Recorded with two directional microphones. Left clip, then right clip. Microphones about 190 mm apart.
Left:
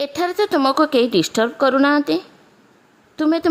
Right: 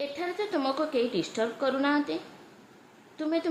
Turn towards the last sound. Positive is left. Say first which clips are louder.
# left 11 dB
turn(degrees=60)  # may be behind; listen again after turning